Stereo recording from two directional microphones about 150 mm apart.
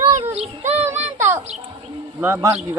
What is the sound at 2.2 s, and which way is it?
Speech, 15° right (ahead or behind).